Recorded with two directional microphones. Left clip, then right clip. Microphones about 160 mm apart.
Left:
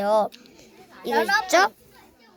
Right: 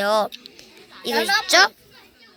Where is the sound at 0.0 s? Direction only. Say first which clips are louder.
Right 1 dB; 10° left (ahead or behind).